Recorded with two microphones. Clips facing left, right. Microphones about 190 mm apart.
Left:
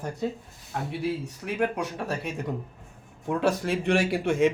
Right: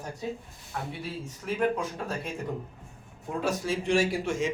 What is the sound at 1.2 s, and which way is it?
A man's voice, 70° left (ahead or behind).